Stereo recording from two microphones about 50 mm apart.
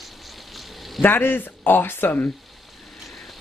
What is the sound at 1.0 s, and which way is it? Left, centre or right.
Speech, left.